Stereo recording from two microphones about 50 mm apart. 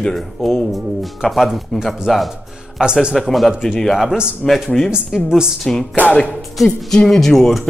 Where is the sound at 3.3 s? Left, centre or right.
Centre.